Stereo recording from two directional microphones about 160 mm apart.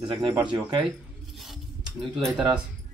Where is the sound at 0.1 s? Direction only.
15° right (ahead or behind).